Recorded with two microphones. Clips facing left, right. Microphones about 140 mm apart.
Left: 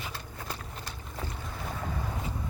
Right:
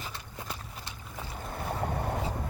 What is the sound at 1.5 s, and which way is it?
Boat, 55° right (ahead or behind).